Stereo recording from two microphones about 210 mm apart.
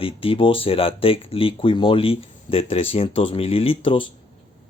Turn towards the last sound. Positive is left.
turn(degrees=25)  # may be behind; listen again after turning